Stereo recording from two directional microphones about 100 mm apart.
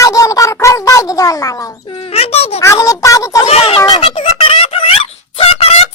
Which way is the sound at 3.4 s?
80° left.